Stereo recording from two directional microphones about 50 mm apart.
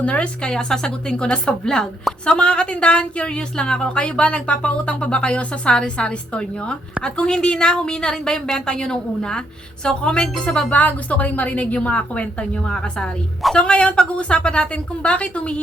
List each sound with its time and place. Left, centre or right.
0.0 s speech: left
0.5 s a woman's voice: centre